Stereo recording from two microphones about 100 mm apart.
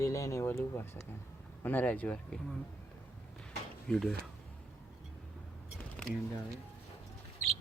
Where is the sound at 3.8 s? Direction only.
5° left (ahead or behind).